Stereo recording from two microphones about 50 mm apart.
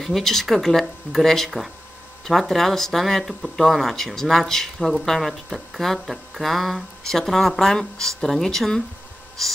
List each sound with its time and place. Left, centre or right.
0.0 s speech: centre
9.4 s snort: centre